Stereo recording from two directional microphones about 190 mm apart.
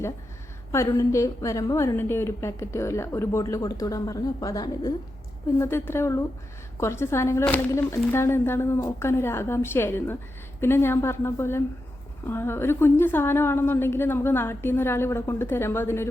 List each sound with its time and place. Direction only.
0.7 s a woman's voice: 15° left (ahead or behind)